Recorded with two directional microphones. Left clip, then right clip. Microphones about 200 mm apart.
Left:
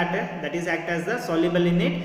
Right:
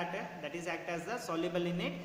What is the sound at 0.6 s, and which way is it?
A man's voice, 45° right (ahead or behind).